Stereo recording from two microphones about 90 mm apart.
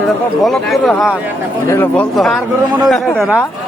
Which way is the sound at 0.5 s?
5° left (ahead or behind).